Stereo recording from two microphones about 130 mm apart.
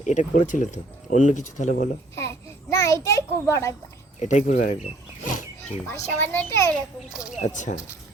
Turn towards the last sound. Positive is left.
turn(degrees=70)  # may be behind; listen again after turning